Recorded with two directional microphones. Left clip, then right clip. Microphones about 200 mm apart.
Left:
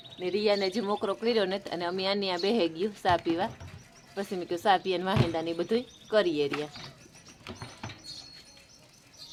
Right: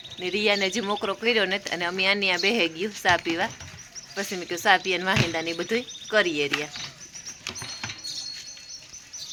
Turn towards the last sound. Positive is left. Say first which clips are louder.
# right 9 dB
turn(degrees=50)  # may be behind; listen again after turning